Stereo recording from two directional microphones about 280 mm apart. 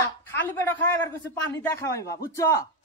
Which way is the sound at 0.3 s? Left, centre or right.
Centre.